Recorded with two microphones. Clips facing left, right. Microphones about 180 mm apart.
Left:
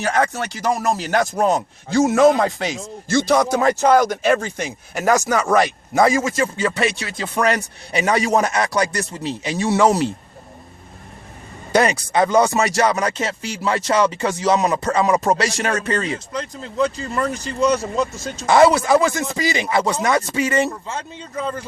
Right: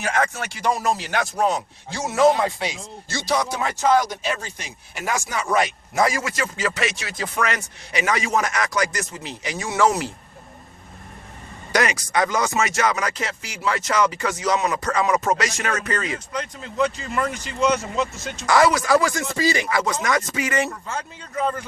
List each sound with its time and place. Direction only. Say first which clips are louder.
0.0 s speech: left 4 dB; 35° left (ahead or behind)
6.0 s speech: left 5 dB; 25° left (ahead or behind)
11.7 s speech: left 4 dB; 30° left (ahead or behind)
18.4 s speech: left 4 dB; 25° left (ahead or behind)
19.6 s speech: left 4 dB; 30° left (ahead or behind)